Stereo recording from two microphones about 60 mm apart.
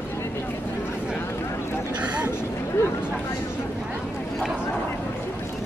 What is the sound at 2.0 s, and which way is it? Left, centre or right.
Vehicle, centre.